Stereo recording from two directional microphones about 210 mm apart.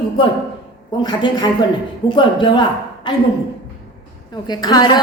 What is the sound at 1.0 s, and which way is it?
A woman's voice, 20° left (ahead or behind).